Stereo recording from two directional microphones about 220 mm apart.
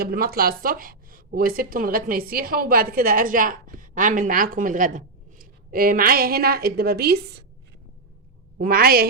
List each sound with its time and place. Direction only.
0.0 s a woman's voice: 45° right (ahead or behind)
8.5 s a woman's voice: 40° right (ahead or behind)